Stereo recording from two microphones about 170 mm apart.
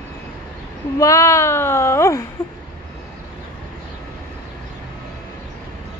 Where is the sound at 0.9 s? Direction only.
20° left (ahead or behind).